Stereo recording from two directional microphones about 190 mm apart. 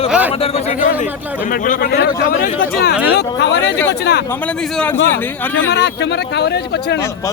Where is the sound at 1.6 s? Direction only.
45° left (ahead or behind); by 3.6 s 60° left (ahead or behind).